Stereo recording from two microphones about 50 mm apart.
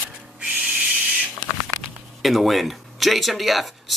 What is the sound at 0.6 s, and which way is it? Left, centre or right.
Owl, right.